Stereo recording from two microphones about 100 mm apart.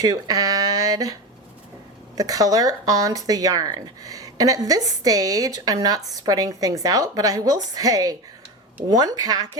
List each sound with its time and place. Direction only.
0.0 s speech: 40° right (ahead or behind)
2.1 s speech: 40° right (ahead or behind)